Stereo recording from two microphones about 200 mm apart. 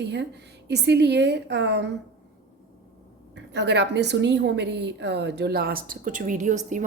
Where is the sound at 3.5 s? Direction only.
60° right (ahead or behind); by 6.6 s 40° right (ahead or behind).